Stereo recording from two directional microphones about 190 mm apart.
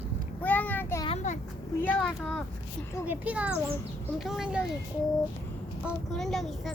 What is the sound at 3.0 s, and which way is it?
A child's voice, 5° right (ahead or behind).